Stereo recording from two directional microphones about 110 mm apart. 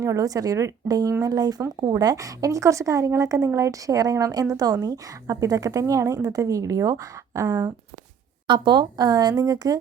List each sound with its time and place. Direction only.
0.0 s a woman's voice: 30° right (ahead or behind)
8.4 s a woman's voice: 45° right (ahead or behind)